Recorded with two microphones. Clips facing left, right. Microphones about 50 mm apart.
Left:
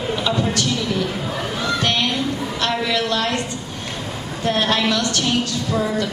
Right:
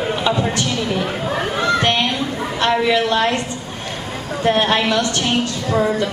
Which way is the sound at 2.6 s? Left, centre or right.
Right.